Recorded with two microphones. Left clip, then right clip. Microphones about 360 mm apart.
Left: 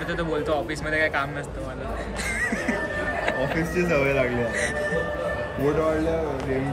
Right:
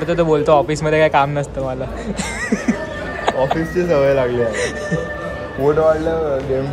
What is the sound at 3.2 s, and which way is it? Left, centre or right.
A man's voice, centre.